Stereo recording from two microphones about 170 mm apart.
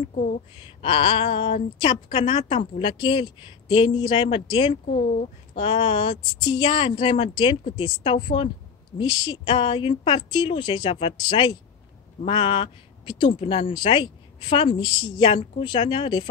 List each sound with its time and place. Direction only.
0.8 s a woman's voice: 30° left (ahead or behind)